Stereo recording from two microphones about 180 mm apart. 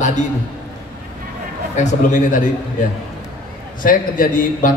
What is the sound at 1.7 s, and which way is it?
Speech, 45° left (ahead or behind).